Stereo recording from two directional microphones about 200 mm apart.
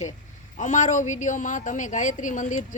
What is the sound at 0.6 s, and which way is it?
A woman's voice, 40° left (ahead or behind).